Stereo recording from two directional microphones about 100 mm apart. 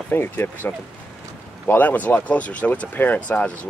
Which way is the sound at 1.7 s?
15° left (ahead or behind).